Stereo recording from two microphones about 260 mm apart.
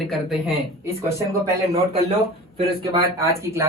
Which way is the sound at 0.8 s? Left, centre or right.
Centre.